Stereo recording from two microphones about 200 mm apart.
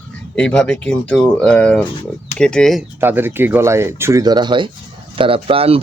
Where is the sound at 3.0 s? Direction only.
10° right (ahead or behind).